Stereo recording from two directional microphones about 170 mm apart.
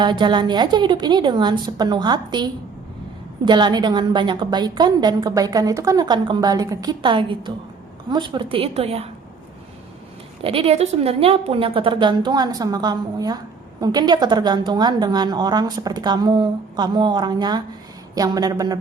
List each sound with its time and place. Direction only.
0.0 s a woman's voice: 25° right (ahead or behind)
10.4 s a woman's voice: 35° right (ahead or behind)